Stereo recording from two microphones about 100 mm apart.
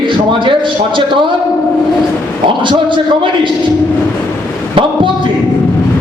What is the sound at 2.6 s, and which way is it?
Speech, 55° right (ahead or behind).